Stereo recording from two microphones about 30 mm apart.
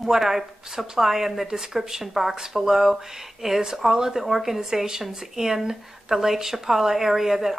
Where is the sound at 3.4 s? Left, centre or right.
Centre.